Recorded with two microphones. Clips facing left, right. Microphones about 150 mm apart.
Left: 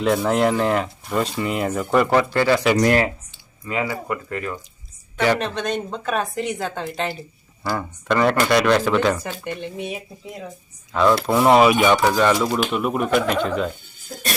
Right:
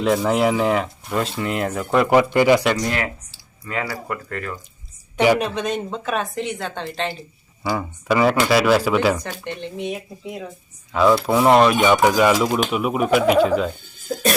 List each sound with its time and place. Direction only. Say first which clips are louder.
0.0 s speech: even; centre (ahead or behind)
2.0 s speech: right 3 dB; 15° right (ahead or behind)
3.7 s speech: left 2 dB; 10° left (ahead or behind)
5.1 s speech: right 3 dB; 10° right (ahead or behind); by 7.2 s 5° left (ahead or behind)
7.6 s speech: right 1 dB; 10° right (ahead or behind)
9.4 s speech: even; 5° left (ahead or behind)
12.0 s speech: right 2 dB; 10° right (ahead or behind)